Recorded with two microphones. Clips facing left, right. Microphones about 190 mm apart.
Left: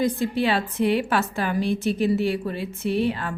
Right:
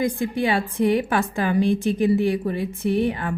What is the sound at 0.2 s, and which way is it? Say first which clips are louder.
Speech: even; 15° right (ahead or behind).